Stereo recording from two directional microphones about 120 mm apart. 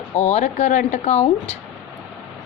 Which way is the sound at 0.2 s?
65° left (ahead or behind).